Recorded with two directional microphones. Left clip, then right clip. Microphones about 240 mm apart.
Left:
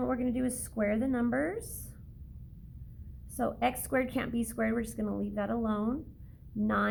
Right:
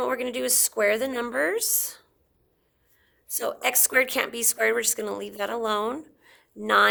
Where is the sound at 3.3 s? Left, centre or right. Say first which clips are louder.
Right 4 dB; right.